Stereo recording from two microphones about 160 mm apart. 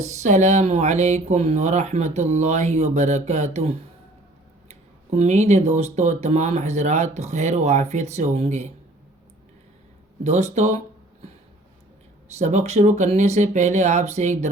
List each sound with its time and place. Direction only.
0.0 s speech: 45° right (ahead or behind)
10.2 s speech: 45° right (ahead or behind)
12.4 s speech: 45° right (ahead or behind)